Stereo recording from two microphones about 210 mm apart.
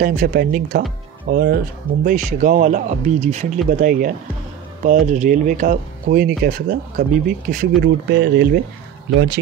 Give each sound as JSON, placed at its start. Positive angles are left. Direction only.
{"t": 0.0, "sound": "speech", "side_deg": -45}